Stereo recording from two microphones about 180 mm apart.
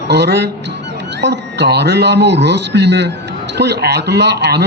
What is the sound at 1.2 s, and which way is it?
A man's voice, 70° right (ahead or behind).